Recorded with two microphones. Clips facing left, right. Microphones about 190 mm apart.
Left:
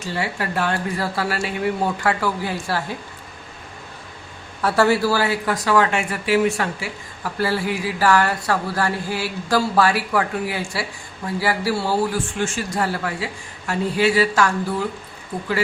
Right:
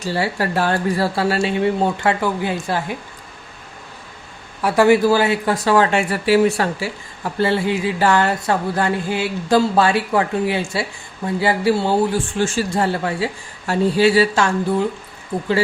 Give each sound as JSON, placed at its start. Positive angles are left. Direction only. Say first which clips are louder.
{"t": 0.0, "sound": "speech", "louder": "right 5 dB", "side_deg": -35}
{"t": 4.6, "sound": "speech", "louder": "right 4 dB", "side_deg": -15}